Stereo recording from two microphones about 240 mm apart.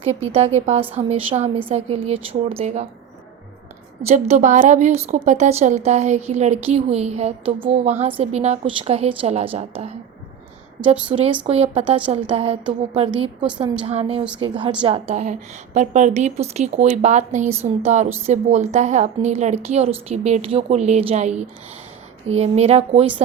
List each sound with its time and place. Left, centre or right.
0.0 s a woman's voice: right
0.8 s a woman's voice: centre
1.7 s a woman's voice: right
4.0 s a woman's voice: right
7.9 s a woman's voice: centre
8.2 s a woman's voice: right
11.0 s a woman's voice: right